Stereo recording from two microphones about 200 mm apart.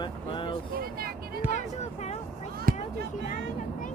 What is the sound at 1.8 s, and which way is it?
Speech, 35° left (ahead or behind).